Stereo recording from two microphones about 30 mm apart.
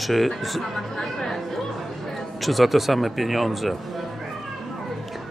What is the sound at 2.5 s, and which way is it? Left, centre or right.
Speech, centre.